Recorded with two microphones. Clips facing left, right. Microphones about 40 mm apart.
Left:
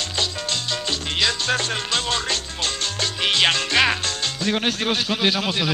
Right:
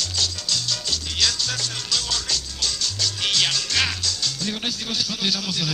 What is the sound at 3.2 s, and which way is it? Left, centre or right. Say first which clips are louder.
Music: left 5 dB; left.